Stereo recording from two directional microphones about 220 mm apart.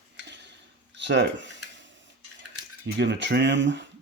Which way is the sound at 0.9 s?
55° right (ahead or behind).